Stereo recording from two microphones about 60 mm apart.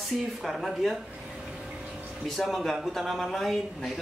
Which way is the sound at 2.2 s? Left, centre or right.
Centre.